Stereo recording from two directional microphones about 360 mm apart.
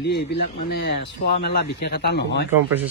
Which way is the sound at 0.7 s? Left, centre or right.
Left.